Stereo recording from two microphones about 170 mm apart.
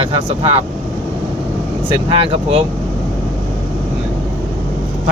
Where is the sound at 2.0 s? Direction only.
30° right (ahead or behind).